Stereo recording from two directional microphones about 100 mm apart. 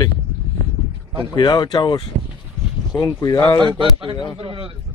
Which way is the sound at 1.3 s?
50° left (ahead or behind).